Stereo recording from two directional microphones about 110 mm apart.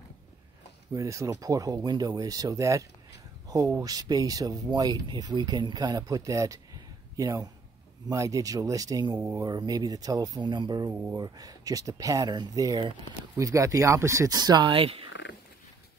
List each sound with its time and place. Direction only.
0.9 s speech: 30° right (ahead or behind)
14.7 s speech: 55° right (ahead or behind)